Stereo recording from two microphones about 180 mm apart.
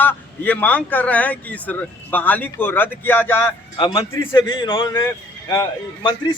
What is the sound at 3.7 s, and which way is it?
A man's voice, 25° left (ahead or behind).